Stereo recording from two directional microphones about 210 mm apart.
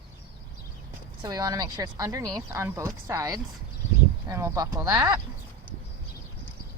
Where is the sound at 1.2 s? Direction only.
15° right (ahead or behind).